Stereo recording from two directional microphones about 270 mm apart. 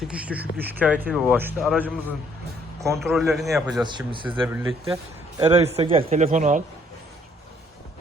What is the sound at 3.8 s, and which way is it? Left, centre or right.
A man's voice, centre.